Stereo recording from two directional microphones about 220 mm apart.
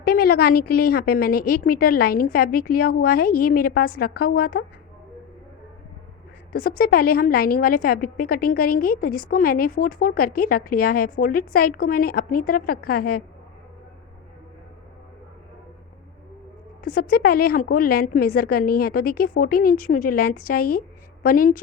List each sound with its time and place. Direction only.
0.0 s a woman's voice: 45° left (ahead or behind)
6.5 s a woman's voice: 40° left (ahead or behind)
16.8 s a woman's voice: 40° left (ahead or behind)